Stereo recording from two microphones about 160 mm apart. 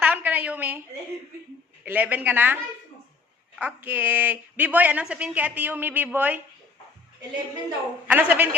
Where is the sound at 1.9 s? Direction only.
10° right (ahead or behind).